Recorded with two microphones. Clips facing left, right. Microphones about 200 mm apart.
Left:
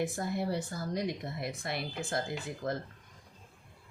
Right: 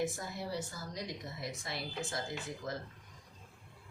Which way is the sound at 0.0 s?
55° left (ahead or behind).